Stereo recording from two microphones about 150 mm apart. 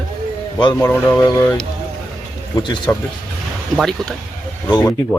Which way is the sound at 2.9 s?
15° left (ahead or behind).